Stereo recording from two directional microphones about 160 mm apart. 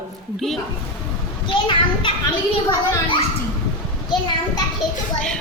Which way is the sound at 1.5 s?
30° left (ahead or behind).